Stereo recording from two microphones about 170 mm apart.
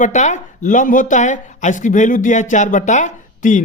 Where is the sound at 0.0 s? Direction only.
45° left (ahead or behind).